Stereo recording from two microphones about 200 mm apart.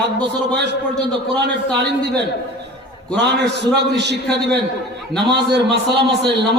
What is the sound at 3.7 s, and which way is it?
Speech, 60° right (ahead or behind).